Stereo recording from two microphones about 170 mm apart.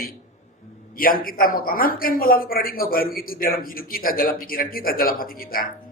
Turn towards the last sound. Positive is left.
turn(degrees=60)  # may be behind; listen again after turning